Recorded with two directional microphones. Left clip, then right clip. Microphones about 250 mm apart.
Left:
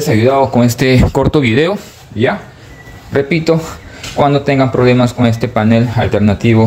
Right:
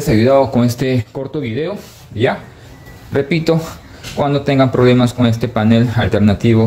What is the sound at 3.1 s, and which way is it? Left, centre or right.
Speech, centre.